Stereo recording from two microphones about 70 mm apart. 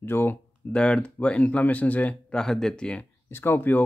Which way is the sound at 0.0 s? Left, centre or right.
Left.